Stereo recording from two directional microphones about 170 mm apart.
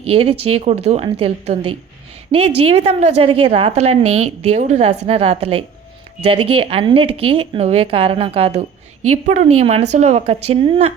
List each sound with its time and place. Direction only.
0.0 s a woman's voice: 35° right (ahead or behind)
9.0 s a woman's voice: 45° right (ahead or behind)